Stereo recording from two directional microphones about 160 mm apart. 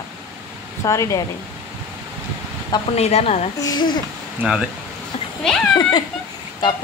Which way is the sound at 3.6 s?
25° left (ahead or behind).